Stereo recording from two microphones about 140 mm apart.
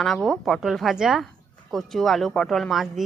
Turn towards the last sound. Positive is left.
turn(degrees=0)  # may be behind; listen again after turning